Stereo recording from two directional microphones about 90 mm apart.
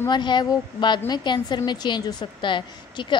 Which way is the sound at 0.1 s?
55° left (ahead or behind).